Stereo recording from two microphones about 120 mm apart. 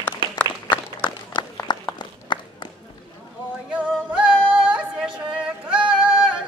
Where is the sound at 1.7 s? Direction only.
40° left (ahead or behind).